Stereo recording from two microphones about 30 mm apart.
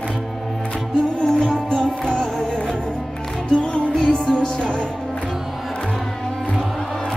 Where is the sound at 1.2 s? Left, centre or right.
Left.